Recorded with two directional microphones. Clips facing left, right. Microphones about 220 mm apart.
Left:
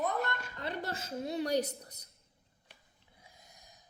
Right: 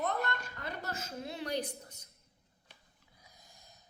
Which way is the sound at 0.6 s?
30° left (ahead or behind).